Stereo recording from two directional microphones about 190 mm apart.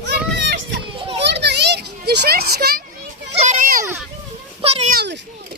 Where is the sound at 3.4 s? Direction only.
40° right (ahead or behind).